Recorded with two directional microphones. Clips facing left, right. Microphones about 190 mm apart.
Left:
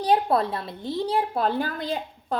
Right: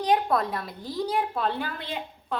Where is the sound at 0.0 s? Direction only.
30° left (ahead or behind).